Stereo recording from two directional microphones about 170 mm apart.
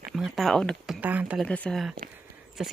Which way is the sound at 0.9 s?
10° right (ahead or behind).